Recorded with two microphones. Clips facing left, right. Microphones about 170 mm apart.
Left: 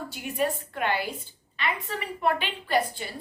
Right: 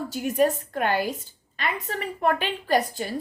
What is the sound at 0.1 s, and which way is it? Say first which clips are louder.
A woman's voice: right 7 dB; 40° right (ahead or behind).